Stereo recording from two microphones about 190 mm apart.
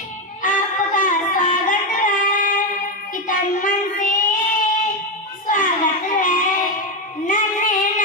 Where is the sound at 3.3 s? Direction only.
45° left (ahead or behind).